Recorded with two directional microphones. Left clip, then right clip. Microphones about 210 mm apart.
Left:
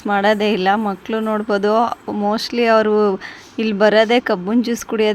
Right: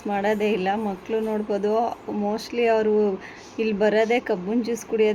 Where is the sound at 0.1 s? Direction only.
45° left (ahead or behind).